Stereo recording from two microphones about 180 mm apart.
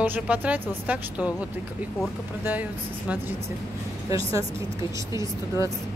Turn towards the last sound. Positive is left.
turn(degrees=-15)  # may be behind; listen again after turning